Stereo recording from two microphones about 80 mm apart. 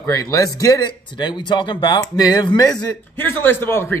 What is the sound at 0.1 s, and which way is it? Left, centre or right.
Speech, left.